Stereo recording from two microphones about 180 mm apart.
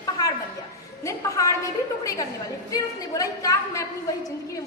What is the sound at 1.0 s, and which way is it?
A woman's voice, 20° left (ahead or behind).